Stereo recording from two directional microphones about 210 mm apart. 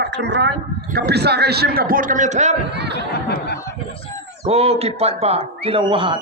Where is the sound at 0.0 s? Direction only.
55° right (ahead or behind); by 2.6 s 35° right (ahead or behind).